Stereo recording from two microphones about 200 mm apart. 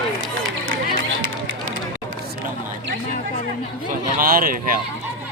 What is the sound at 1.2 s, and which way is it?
Run, 75° right (ahead or behind).